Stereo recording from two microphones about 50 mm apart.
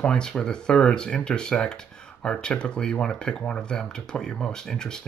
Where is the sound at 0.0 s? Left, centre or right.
Centre.